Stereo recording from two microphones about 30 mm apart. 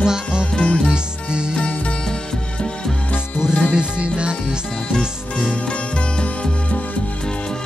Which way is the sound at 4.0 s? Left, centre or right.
Right.